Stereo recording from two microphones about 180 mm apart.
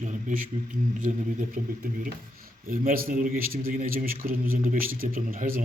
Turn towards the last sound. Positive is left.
turn(degrees=-50)  # may be behind; listen again after turning